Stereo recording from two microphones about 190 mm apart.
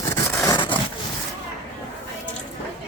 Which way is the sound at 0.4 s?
25° left (ahead or behind).